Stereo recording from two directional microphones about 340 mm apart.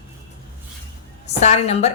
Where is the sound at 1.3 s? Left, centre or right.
Centre.